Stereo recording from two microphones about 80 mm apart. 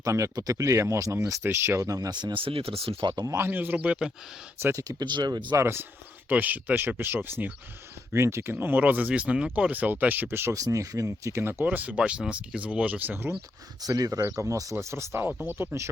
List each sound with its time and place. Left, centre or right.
0.0 s speech: right
1.5 s speech: right
2.7 s speech: right
3.0 s speech: right
3.3 s speech: right
4.6 s speech: right
5.0 s speech: right
5.5 s speech: right
10.5 s speech: right
11.6 s speech: centre
13.8 s speech: right
14.2 s speech: right